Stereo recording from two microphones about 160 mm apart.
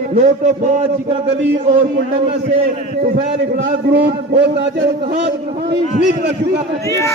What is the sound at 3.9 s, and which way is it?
Speech, 90° right.